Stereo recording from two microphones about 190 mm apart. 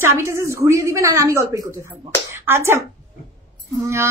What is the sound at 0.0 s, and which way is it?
Speech, 15° right (ahead or behind).